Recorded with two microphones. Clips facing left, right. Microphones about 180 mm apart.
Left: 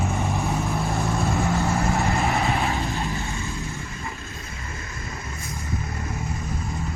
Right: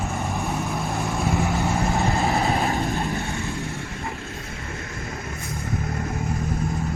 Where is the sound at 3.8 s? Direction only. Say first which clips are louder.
Right 3 dB; 80° right.